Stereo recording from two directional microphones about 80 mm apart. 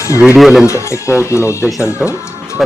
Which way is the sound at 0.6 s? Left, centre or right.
Left.